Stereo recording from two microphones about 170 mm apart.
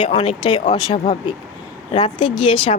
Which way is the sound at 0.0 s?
30° left (ahead or behind).